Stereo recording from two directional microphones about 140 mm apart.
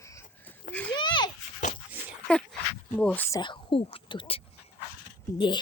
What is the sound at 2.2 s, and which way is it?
Dog, 5° left (ahead or behind).